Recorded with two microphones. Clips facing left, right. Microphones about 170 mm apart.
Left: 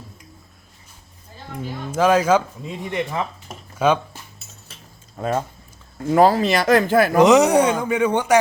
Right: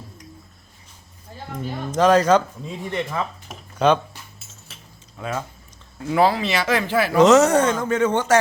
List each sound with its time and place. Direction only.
1.9 s speech: 5° left (ahead or behind)
5.1 s speech: 40° left (ahead or behind)
7.2 s speech: 15° left (ahead or behind)